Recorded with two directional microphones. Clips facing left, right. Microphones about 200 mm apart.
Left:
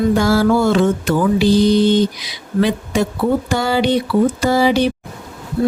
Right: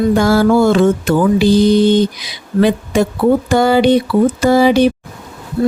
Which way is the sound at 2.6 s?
50° right (ahead or behind).